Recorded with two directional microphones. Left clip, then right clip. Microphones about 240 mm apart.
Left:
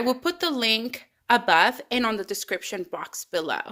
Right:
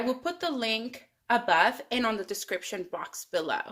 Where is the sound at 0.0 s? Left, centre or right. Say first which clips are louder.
Left 5 dB; left.